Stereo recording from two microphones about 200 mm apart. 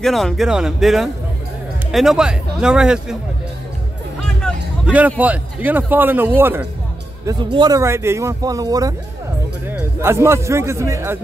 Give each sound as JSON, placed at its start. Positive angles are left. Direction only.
{"t": 0.0, "sound": "speech", "side_deg": 0}
{"t": 4.4, "sound": "a man's voice", "side_deg": -5}